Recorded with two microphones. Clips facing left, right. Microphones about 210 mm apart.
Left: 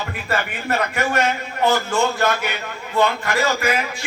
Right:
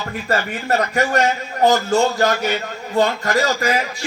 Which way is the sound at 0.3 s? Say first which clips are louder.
Right 3 dB; 40° right (ahead or behind).